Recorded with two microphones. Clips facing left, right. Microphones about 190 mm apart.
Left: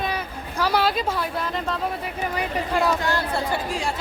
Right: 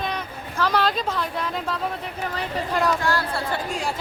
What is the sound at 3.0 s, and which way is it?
Speech, 20° left (ahead or behind).